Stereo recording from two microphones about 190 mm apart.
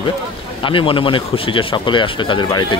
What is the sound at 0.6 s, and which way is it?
Speech, 25° left (ahead or behind).